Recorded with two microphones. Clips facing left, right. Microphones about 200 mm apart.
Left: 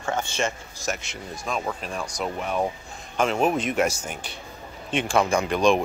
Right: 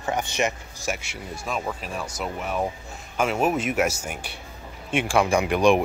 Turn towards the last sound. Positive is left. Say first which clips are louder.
# right 2 dB
turn(degrees=-10)  # may be behind; listen again after turning